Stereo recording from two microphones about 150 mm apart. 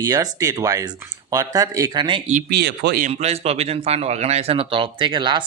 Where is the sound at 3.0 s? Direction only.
45° right (ahead or behind).